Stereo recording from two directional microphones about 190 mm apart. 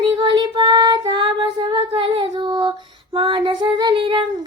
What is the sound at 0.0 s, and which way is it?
Child singing, 25° right (ahead or behind).